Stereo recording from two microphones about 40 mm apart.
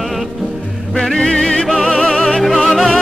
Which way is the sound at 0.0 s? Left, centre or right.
Centre.